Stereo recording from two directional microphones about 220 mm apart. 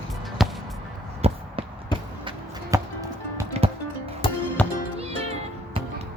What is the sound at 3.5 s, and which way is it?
Music, 30° right (ahead or behind).